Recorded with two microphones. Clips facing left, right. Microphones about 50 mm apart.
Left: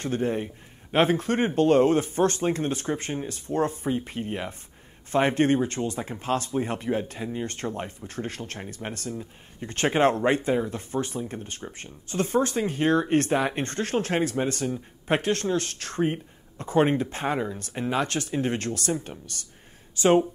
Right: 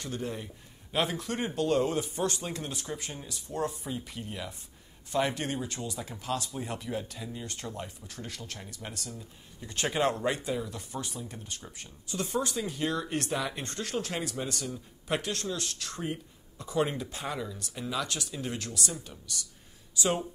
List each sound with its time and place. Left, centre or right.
0.0 s speech: left